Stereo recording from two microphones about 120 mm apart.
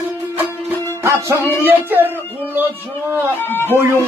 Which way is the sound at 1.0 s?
25° right (ahead or behind).